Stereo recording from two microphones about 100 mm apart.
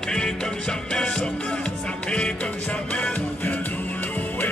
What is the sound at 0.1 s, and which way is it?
Music, 10° left (ahead or behind).